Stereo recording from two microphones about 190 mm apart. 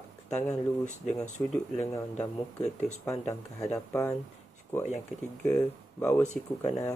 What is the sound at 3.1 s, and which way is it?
Speech, 15° left (ahead or behind).